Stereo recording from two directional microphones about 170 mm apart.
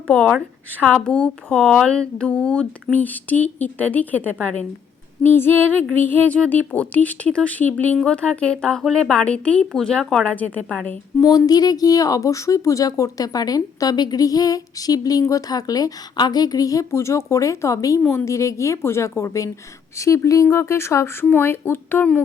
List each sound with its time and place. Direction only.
0.1 s speech: 5° left (ahead or behind)
11.2 s speech: 20° left (ahead or behind)